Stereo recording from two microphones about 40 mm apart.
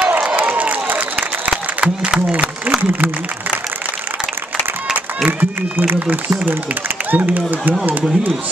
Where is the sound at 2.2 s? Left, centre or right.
Right.